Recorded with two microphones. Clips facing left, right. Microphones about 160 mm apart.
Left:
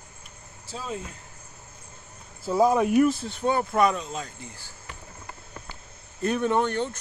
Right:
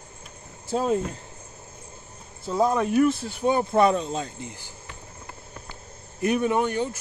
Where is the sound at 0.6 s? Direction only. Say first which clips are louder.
Right 11 dB; 50° right (ahead or behind).